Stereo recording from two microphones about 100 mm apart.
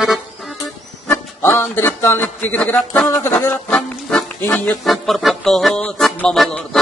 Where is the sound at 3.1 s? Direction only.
25° left (ahead or behind).